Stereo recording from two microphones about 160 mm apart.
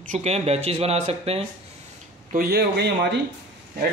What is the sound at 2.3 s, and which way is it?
Speech, 80° right.